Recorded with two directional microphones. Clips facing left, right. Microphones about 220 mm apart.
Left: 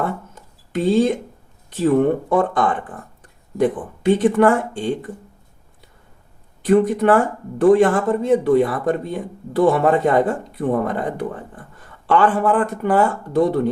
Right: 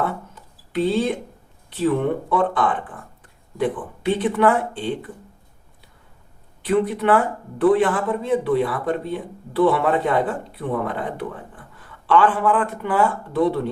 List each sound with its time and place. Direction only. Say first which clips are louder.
0.0 s a sound: left 1 dB; 45° left (ahead or behind)
1.7 s speech: left 4 dB; 45° left (ahead or behind)
6.6 s speech: left 5 dB; 45° left (ahead or behind)